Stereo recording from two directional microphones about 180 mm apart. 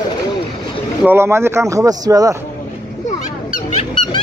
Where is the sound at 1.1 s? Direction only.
15° right (ahead or behind).